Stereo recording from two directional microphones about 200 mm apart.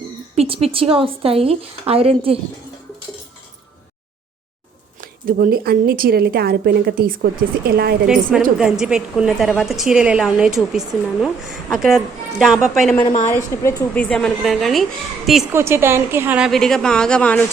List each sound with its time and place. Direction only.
0.3 s a woman's voice: 30° right (ahead or behind)
4.9 s a woman's voice: 45° right (ahead or behind)
8.0 s a woman's voice: 5° right (ahead or behind)
13.2 s a woman's voice: 15° left (ahead or behind)
15.5 s a woman's voice: 10° right (ahead or behind); by 17.4 s 5° left (ahead or behind)